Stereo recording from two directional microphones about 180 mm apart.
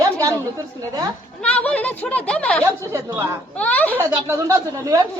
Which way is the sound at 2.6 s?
15° right (ahead or behind).